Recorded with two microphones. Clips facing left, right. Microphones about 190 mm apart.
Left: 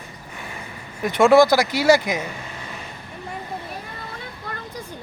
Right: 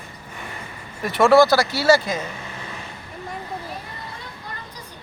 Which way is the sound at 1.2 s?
15° left (ahead or behind).